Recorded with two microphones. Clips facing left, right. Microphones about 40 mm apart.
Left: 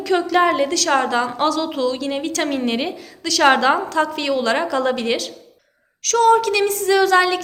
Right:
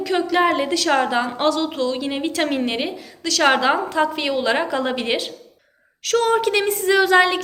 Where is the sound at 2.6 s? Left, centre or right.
Centre; by 7.4 s right.